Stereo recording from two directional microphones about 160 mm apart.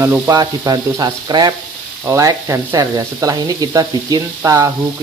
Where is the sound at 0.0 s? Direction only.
20° right (ahead or behind).